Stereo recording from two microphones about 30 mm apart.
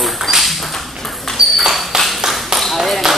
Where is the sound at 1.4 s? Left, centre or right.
Centre.